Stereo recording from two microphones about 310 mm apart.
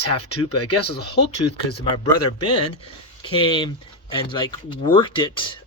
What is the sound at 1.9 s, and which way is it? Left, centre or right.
Speech, centre.